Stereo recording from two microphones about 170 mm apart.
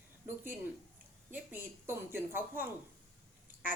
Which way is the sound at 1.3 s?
10° right (ahead or behind).